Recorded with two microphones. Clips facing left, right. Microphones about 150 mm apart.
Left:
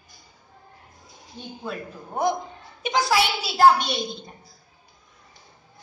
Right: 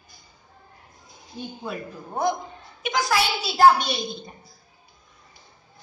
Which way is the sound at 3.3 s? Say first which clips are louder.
Right 2 dB; centre (ahead or behind).